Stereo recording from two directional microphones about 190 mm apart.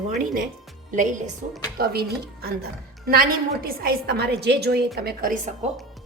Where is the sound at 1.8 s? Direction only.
55° right (ahead or behind).